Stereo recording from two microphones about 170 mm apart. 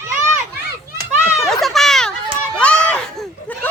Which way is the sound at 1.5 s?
Centre (ahead or behind).